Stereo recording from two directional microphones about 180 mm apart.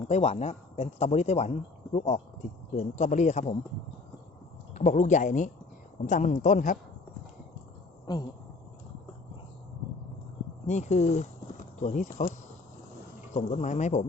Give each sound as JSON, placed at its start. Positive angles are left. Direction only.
{"t": 0.1, "sound": "speech", "side_deg": 35}
{"t": 4.7, "sound": "a man's voice", "side_deg": 40}
{"t": 8.0, "sound": "speech", "side_deg": 20}
{"t": 10.7, "sound": "a man's voice", "side_deg": 40}
{"t": 13.3, "sound": "speech", "side_deg": 40}